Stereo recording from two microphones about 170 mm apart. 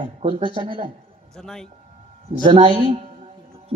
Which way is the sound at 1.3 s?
5° left (ahead or behind).